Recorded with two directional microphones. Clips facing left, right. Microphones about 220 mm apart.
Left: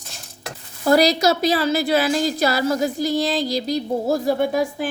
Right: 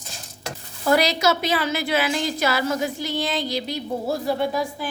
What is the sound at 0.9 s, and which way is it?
A woman's voice, 35° left (ahead or behind).